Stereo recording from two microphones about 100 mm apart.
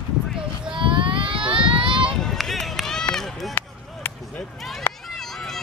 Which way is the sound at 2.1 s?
5° left (ahead or behind).